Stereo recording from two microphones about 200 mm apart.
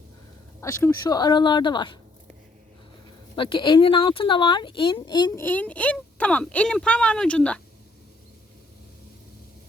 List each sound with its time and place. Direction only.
0.6 s speech: 15° left (ahead or behind)
3.3 s speech: 25° left (ahead or behind)
5.4 s speech: 10° left (ahead or behind)